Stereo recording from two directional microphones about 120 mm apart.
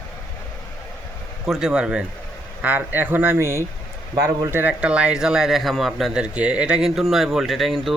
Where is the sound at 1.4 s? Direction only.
5° right (ahead or behind).